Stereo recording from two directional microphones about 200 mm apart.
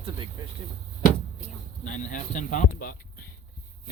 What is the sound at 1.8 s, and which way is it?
Speech, 40° left (ahead or behind).